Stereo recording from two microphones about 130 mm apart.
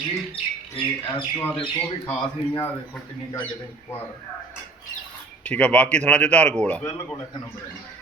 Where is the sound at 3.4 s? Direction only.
15° left (ahead or behind).